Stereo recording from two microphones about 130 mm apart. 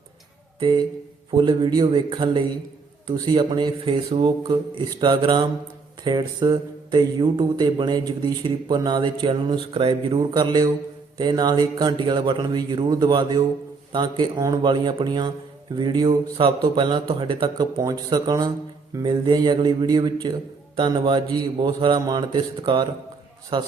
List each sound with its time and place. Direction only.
0.6 s speech: 35° right (ahead or behind)